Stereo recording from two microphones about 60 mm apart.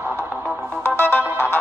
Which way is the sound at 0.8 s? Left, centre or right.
Left.